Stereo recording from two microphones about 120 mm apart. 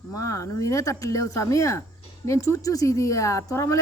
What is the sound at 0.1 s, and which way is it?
Speech, 25° left (ahead or behind).